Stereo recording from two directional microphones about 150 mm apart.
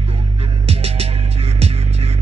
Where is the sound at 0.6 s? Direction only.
40° right (ahead or behind).